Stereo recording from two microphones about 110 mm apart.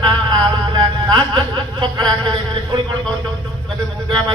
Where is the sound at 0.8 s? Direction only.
40° right (ahead or behind).